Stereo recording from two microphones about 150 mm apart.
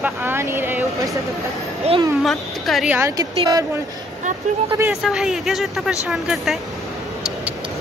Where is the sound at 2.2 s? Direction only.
Centre (ahead or behind).